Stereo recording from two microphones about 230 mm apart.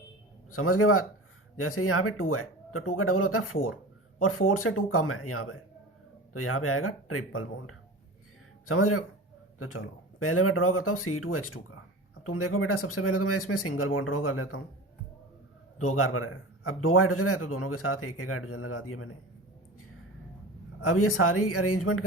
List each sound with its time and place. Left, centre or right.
0.5 s speech: left
15.8 s speech: left
20.8 s speech: left